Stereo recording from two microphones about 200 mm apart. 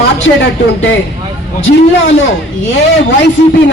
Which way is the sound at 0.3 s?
60° left (ahead or behind).